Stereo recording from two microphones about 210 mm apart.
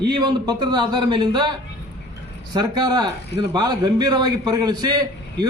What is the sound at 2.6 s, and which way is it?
A man's voice, 20° right (ahead or behind).